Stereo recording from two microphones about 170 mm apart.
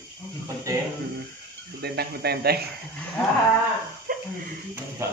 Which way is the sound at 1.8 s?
70° right (ahead or behind).